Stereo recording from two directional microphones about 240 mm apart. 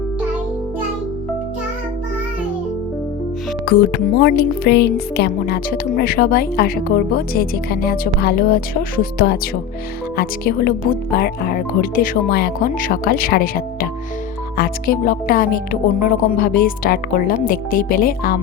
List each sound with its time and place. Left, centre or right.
3.7 s speech: left